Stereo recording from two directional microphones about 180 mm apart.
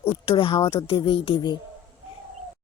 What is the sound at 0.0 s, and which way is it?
Speech, 30° left (ahead or behind).